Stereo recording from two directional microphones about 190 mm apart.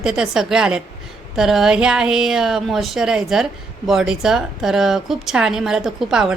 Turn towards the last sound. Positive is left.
turn(degrees=-5)  # may be behind; listen again after turning